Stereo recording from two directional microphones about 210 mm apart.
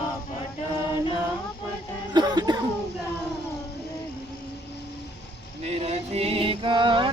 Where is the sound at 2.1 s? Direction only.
20° right (ahead or behind).